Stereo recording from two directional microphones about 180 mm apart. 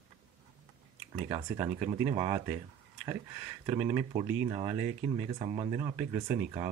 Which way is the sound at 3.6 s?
15° right (ahead or behind).